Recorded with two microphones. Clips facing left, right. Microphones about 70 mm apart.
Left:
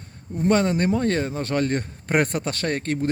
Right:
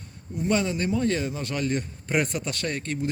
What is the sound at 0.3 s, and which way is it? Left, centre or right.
A man's voice, left.